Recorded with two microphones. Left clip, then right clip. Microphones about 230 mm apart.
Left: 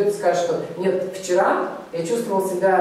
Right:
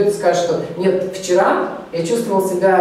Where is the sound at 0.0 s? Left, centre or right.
Centre.